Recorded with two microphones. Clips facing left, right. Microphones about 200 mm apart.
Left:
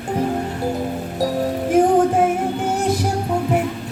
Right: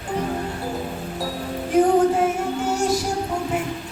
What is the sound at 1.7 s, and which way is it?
Music, 50° left (ahead or behind).